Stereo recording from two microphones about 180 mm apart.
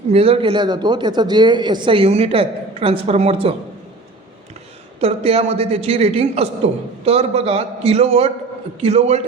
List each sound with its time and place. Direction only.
0.1 s a man's voice: 30° right (ahead or behind)
4.9 s a man's voice: 35° right (ahead or behind)